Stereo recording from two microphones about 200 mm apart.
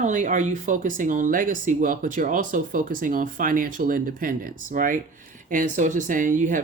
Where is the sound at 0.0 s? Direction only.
40° right (ahead or behind).